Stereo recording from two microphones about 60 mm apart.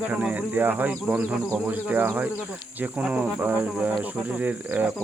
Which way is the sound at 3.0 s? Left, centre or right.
Centre.